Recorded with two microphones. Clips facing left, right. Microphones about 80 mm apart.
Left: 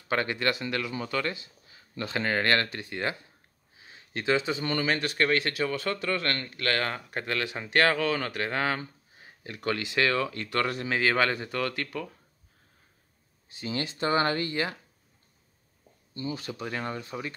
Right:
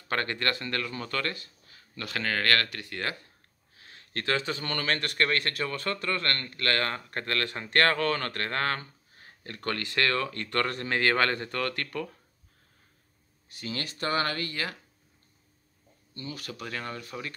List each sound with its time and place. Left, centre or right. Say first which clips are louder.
0.1 s speech: left 2 dB; centre
13.6 s speech: left 4 dB; left
16.2 s speech: left 5 dB; left